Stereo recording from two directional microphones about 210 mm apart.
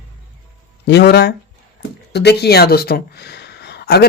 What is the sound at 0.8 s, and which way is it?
Speech, 50° left (ahead or behind).